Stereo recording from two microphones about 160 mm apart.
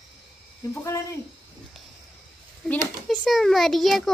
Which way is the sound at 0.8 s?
15° left (ahead or behind).